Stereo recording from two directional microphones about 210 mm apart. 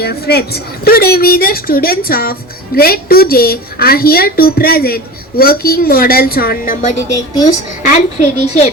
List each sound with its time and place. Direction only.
0.0 s a woman's voice: 50° left (ahead or behind); by 8.7 s 35° left (ahead or behind)